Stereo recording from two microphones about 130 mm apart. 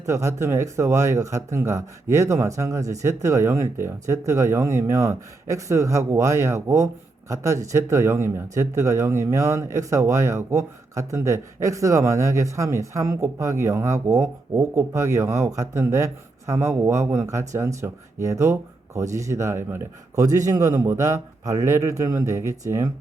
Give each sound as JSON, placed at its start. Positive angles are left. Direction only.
{"t": 0.0, "sound": "speech", "side_deg": -20}